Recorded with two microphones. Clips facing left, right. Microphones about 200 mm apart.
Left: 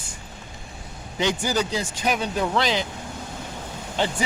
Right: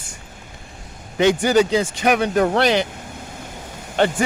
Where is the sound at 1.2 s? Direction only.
60° right (ahead or behind).